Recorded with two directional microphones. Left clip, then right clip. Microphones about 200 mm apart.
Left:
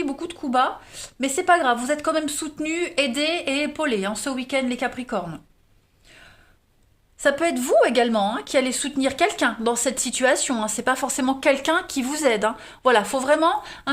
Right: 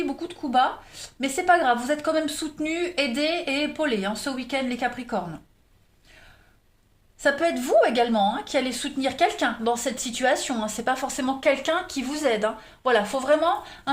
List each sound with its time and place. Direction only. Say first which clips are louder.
0.0 s speech: left 2 dB; 40° left (ahead or behind)
7.2 s a woman's voice: left 2 dB; 40° left (ahead or behind)